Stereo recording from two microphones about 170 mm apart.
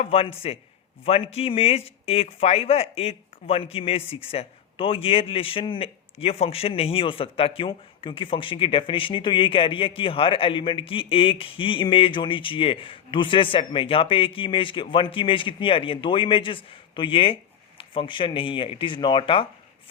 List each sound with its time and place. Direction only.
0.0 s speech: 35° left (ahead or behind)